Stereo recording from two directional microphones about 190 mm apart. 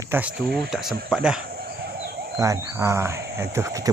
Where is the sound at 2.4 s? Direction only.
15° right (ahead or behind).